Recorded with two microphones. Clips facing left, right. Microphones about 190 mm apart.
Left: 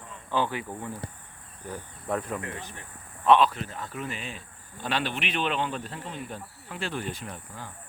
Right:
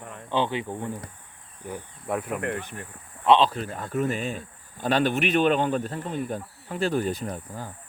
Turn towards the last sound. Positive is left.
turn(degrees=-40)  # may be behind; listen again after turning